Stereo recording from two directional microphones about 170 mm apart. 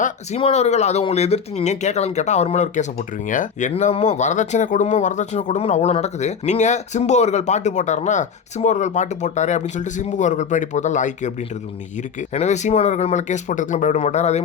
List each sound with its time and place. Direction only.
0.0 s speech: 35° left (ahead or behind)
3.7 s speech: 40° left (ahead or behind)
12.3 s speech: 45° left (ahead or behind)